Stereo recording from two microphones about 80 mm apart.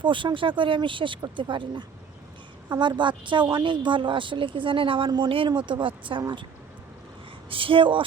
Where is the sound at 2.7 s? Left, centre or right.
Right.